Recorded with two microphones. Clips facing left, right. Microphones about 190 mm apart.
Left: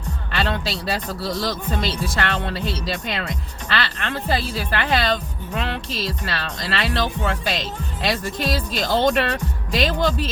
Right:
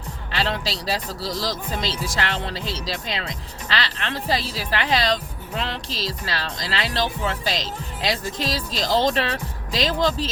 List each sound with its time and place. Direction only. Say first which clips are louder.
0.3 s speech: left 1 dB; 55° left (ahead or behind)